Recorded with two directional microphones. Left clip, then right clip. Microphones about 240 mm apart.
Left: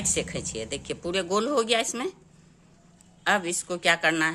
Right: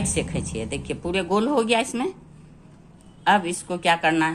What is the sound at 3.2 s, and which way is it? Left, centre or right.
A woman's voice, left.